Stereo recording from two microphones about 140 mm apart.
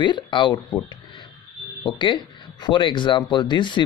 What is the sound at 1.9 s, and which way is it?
Speech, 35° left (ahead or behind).